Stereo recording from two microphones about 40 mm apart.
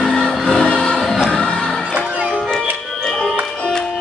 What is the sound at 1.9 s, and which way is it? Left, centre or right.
Music, right.